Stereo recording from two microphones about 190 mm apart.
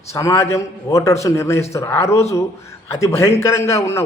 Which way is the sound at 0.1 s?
15° left (ahead or behind).